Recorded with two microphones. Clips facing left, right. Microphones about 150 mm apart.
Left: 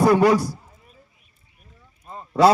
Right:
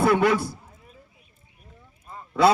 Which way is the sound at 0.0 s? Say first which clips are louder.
Left 4 dB; 40° left (ahead or behind).